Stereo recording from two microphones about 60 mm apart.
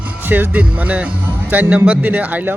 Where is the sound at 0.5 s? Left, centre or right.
Right.